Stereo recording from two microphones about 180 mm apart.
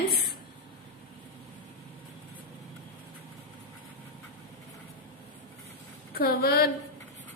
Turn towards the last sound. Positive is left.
turn(degrees=60)  # may be behind; listen again after turning